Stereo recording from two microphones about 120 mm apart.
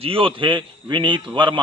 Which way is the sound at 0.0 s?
50° right (ahead or behind).